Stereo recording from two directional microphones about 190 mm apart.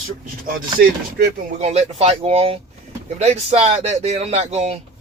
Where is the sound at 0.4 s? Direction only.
55° right (ahead or behind).